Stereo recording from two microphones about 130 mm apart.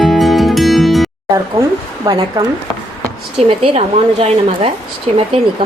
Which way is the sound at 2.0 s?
30° right (ahead or behind).